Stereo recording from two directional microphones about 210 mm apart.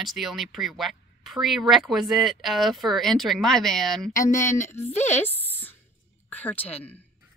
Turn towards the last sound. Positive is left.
turn(degrees=10)  # may be behind; listen again after turning